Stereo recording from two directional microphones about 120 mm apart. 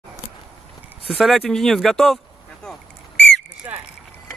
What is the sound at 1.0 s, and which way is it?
Speech, centre (ahead or behind).